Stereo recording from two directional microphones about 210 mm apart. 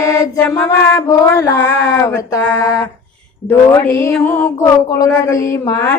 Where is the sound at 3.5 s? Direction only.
15° left (ahead or behind).